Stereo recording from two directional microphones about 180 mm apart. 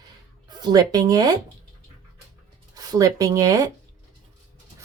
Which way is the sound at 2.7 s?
20° right (ahead or behind).